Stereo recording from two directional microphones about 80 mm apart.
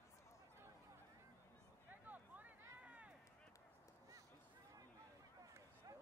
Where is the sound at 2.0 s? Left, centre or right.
Right.